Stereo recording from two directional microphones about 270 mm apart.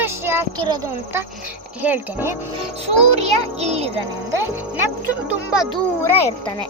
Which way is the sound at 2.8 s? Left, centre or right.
Right.